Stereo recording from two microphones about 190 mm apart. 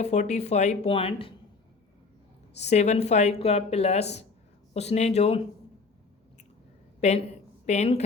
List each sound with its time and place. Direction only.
0.0 s speech: 35° left (ahead or behind)
2.6 s speech: 35° left (ahead or behind)
7.0 s a woman's voice: 35° left (ahead or behind)